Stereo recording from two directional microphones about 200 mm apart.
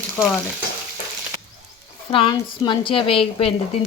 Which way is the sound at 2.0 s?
25° left (ahead or behind).